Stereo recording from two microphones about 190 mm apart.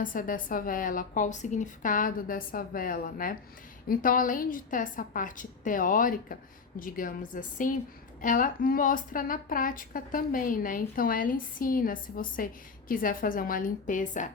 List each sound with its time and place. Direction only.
0.0 s a woman's voice: 45° left (ahead or behind)